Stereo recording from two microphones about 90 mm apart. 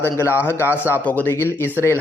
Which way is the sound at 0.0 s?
25° left (ahead or behind).